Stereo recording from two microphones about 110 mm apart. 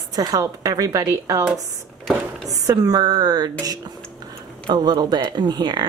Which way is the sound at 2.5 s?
30° right (ahead or behind).